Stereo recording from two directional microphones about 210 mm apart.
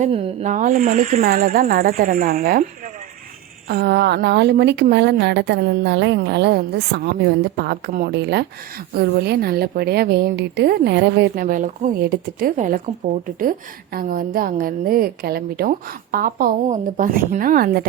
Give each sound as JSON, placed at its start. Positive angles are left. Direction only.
{"t": 0.0, "sound": "a woman's voice", "side_deg": -30}
{"t": 3.7, "sound": "a woman's voice", "side_deg": -50}